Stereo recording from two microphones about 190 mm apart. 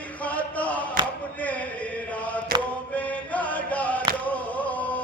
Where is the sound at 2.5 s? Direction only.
50° right (ahead or behind).